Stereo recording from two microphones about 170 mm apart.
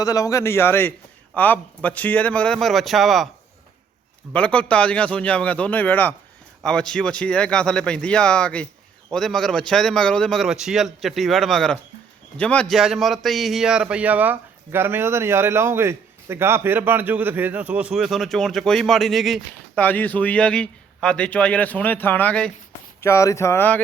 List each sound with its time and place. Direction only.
0.0 s a man's voice: 20° left (ahead or behind); by 3.2 s centre (ahead or behind)
4.3 s a man's voice: 5° left (ahead or behind)